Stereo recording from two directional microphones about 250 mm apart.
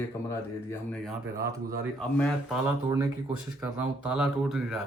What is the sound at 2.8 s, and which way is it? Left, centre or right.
Speech, centre.